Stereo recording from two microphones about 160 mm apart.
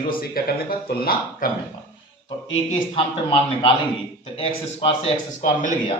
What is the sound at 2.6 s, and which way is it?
A man's voice, 35° left (ahead or behind).